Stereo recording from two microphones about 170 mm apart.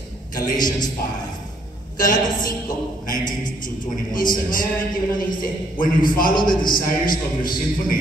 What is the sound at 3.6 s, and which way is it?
A man's voice, 55° left (ahead or behind).